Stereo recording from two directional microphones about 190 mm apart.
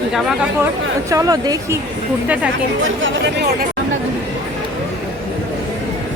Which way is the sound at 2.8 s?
90° right.